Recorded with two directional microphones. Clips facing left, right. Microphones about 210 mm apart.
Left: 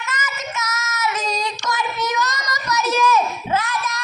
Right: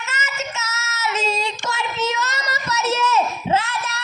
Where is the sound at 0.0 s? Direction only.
25° right (ahead or behind).